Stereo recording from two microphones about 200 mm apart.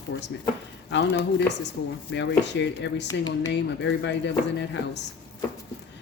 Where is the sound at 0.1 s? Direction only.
65° left (ahead or behind).